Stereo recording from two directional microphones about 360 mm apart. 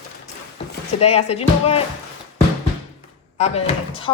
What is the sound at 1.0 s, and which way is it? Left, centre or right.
Speech, centre.